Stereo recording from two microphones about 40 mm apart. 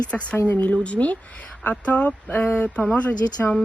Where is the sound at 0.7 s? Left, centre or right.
Left.